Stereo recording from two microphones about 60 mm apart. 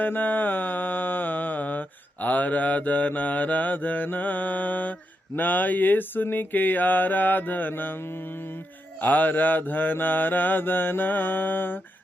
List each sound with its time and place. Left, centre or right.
0.0 s mantra: left